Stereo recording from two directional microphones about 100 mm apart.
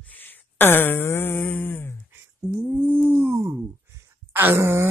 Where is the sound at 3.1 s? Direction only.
25° right (ahead or behind).